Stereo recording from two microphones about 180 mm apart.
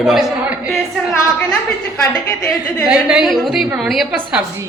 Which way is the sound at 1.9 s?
20° left (ahead or behind).